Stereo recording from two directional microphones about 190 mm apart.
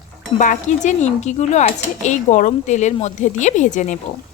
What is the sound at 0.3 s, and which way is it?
Speech, 40° left (ahead or behind).